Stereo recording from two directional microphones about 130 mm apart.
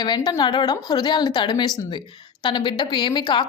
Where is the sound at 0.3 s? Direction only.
35° left (ahead or behind).